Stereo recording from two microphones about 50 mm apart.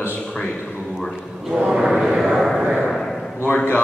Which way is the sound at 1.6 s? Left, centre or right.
Centre.